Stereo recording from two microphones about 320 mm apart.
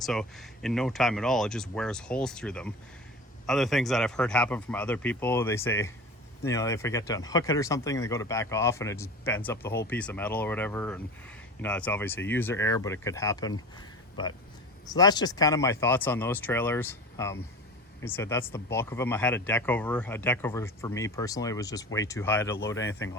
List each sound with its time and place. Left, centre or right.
0.0 s speech: centre
22.8 s speech: left